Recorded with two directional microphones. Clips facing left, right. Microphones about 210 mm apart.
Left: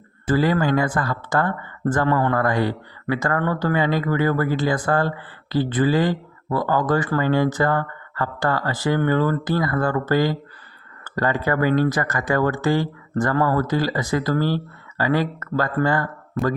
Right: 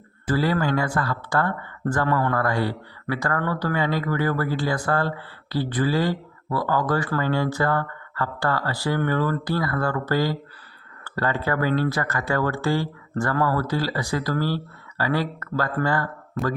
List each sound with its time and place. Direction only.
0.3 s speech: 20° left (ahead or behind)
16.4 s speech: centre (ahead or behind)